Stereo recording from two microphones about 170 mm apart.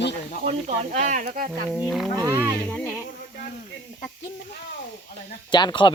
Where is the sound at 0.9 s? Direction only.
45° right (ahead or behind).